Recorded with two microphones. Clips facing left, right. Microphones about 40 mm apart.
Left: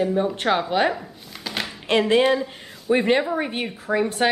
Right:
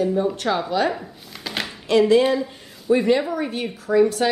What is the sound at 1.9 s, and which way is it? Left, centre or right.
A woman's voice, left.